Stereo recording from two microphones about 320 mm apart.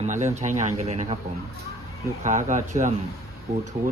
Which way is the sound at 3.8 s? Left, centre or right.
Centre.